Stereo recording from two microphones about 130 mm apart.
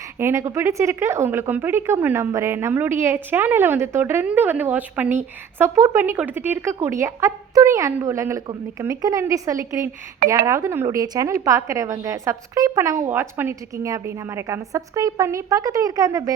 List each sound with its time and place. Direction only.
0.2 s speech: 20° right (ahead or behind)